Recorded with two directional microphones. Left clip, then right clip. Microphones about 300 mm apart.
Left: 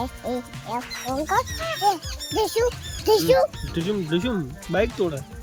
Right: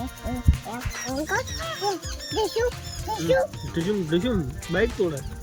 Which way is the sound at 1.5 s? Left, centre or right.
Left.